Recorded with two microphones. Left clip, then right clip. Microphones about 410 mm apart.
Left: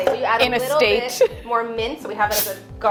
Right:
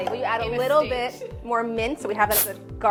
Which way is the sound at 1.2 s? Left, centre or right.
Left.